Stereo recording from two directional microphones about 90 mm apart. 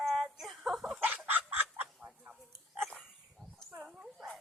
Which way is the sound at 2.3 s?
20° right (ahead or behind).